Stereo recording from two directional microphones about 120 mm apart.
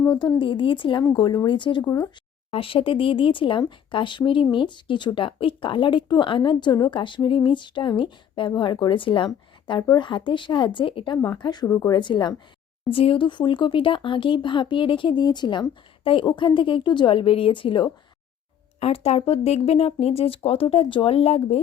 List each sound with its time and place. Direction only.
0.1 s speech: 40° left (ahead or behind)
1.8 s speech: 25° left (ahead or behind)
2.5 s speech: 50° left (ahead or behind)
18.8 s speech: 55° left (ahead or behind)